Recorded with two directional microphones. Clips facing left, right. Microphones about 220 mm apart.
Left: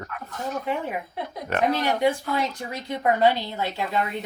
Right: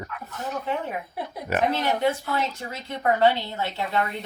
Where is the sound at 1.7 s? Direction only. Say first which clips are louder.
Left 3 dB; 15° left (ahead or behind).